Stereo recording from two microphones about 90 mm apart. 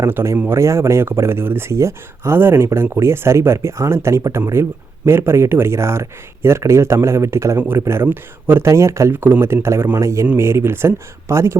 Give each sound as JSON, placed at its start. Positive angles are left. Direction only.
{"t": 0.1, "sound": "speech", "side_deg": -25}